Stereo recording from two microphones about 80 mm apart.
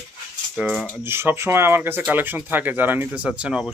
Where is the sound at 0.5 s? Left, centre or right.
Centre.